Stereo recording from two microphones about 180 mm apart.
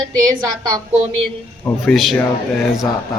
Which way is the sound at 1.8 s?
Centre (ahead or behind).